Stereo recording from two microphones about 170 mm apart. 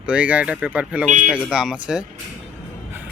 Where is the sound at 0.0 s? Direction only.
5° right (ahead or behind).